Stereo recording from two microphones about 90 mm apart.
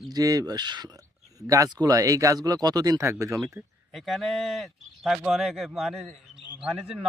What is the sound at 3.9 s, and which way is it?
Speech, centre (ahead or behind).